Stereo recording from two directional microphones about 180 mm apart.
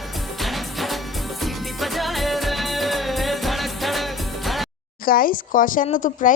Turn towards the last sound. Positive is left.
turn(degrees=45)  # may be behind; listen again after turning